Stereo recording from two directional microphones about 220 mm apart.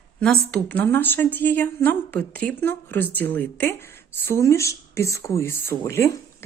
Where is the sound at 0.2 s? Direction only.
5° left (ahead or behind).